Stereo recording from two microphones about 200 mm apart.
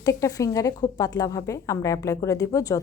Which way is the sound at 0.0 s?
15° left (ahead or behind).